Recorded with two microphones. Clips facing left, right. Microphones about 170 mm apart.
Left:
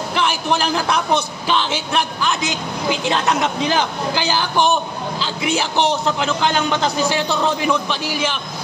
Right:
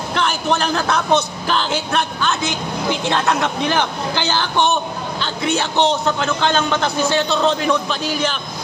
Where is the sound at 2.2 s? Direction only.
15° left (ahead or behind).